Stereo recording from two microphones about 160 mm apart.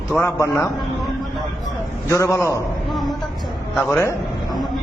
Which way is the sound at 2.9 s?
Centre (ahead or behind).